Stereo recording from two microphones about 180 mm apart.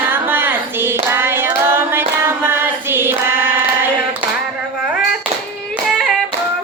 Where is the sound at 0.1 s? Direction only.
10° right (ahead or behind).